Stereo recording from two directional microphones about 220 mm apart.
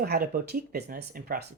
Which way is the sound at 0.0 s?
40° right (ahead or behind).